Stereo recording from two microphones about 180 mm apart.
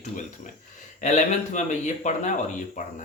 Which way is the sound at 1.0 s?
40° left (ahead or behind).